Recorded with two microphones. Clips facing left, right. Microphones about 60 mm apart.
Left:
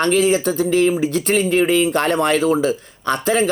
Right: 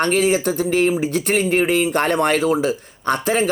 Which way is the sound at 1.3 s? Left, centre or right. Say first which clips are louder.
Left 1 dB; right.